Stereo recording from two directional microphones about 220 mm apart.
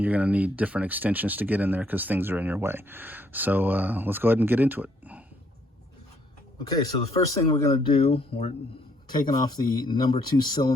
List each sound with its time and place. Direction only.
0.0 s speech: 5° right (ahead or behind)
6.8 s speech: 20° left (ahead or behind)